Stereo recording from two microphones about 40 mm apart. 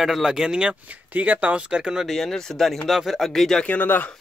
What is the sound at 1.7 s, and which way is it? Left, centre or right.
Speech, right.